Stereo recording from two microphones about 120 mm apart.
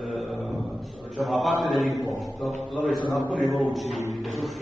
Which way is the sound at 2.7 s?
5° left (ahead or behind).